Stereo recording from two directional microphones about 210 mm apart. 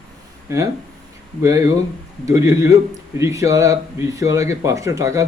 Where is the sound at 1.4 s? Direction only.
15° right (ahead or behind).